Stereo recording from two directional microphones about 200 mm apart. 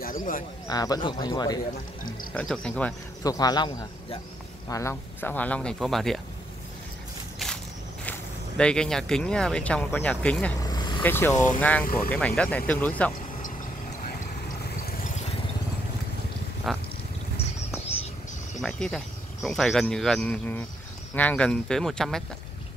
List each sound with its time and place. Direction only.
0.0 s speech: 45° left (ahead or behind)
0.7 s speech: 20° left (ahead or behind)
2.3 s speech: 5° left (ahead or behind)
3.3 s speech: 20° left (ahead or behind); by 6.1 s centre (ahead or behind)
7.4 s walk: centre (ahead or behind)
8.0 s speech: 5° left (ahead or behind)
10.6 s vehicle: 20° left (ahead or behind)
11.0 s speech: 10° left (ahead or behind)
16.6 s cat: centre (ahead or behind)
18.6 s speech: 5° left (ahead or behind)